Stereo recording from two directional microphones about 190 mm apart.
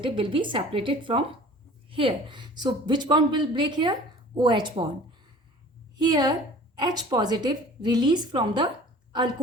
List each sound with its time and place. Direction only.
0.0 s a woman's voice: 25° right (ahead or behind)
6.0 s a woman's voice: 20° right (ahead or behind)